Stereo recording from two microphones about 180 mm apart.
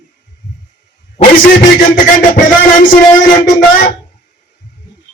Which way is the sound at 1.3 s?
50° left (ahead or behind).